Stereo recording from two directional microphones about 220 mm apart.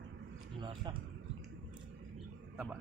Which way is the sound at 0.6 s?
20° right (ahead or behind).